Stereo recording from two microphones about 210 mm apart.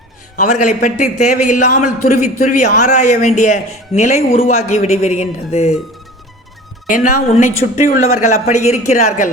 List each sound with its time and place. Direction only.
0.3 s a man's voice: 35° left (ahead or behind)
6.8 s a man's voice: 40° left (ahead or behind)